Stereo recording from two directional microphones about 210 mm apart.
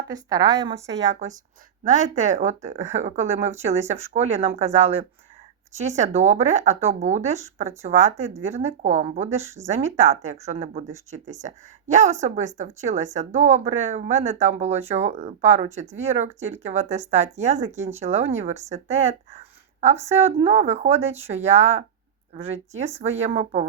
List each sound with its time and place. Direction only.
0.1 s a woman's voice: 15° right (ahead or behind)
1.2 s a woman's voice: 30° right (ahead or behind)
9.4 s a woman's voice: 15° right (ahead or behind)
9.6 s a woman's voice: 30° right (ahead or behind)